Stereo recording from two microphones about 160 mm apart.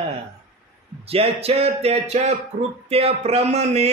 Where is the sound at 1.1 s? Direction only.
40° right (ahead or behind).